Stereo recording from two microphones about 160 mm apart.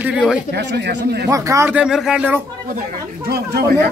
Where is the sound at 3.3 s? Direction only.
80° right.